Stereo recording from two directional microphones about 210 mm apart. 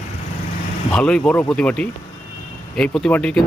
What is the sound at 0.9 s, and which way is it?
Speech, 5° left (ahead or behind).